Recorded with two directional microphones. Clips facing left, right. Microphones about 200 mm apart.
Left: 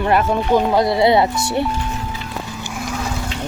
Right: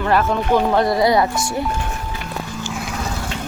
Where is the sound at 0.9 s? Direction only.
25° left (ahead or behind).